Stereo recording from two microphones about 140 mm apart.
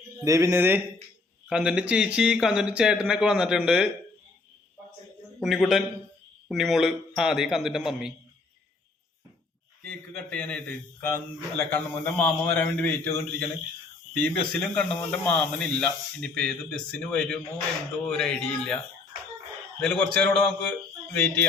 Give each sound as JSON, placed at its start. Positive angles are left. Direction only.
{"t": 0.3, "sound": "speech", "side_deg": -25}
{"t": 5.4, "sound": "speech", "side_deg": 0}
{"t": 10.1, "sound": "a man's voice", "side_deg": 10}
{"t": 19.8, "sound": "a man's voice", "side_deg": 5}